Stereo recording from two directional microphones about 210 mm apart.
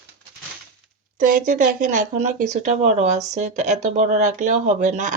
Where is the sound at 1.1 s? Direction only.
40° right (ahead or behind).